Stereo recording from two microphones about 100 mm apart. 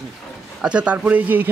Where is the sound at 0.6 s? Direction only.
10° right (ahead or behind).